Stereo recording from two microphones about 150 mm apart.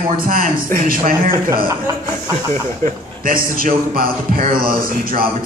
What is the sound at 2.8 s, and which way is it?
A man's voice, 70° right (ahead or behind).